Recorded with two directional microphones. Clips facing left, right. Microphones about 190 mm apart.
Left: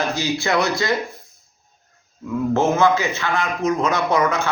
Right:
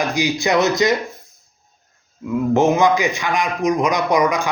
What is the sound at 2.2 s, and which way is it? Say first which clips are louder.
A man's voice: right 3 dB; 15° right (ahead or behind).